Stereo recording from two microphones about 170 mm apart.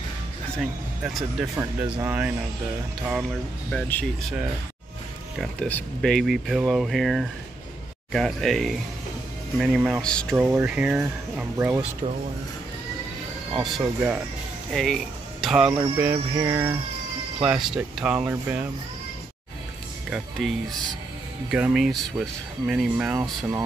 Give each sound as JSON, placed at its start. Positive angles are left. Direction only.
{"t": 0.6, "sound": "speech", "side_deg": 0}
{"t": 3.7, "sound": "speech", "side_deg": 5}
{"t": 5.4, "sound": "speech", "side_deg": 5}
{"t": 10.0, "sound": "speech", "side_deg": 5}
{"t": 10.3, "sound": "speech", "side_deg": -10}
{"t": 13.6, "sound": "speech", "side_deg": 0}
{"t": 15.7, "sound": "speech", "side_deg": -15}
{"t": 17.4, "sound": "speech", "side_deg": -5}
{"t": 20.1, "sound": "speech", "side_deg": 0}
{"t": 23.1, "sound": "speech", "side_deg": -20}